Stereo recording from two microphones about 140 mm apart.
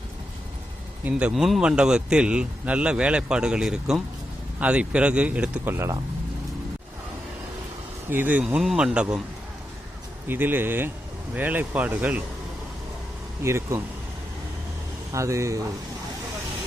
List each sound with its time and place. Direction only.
1.0 s speech: 5° right (ahead or behind)
8.1 s speech: 10° right (ahead or behind)
10.2 s speech: 15° right (ahead or behind)
13.4 s speech: 20° right (ahead or behind)
15.1 s speech: 20° right (ahead or behind)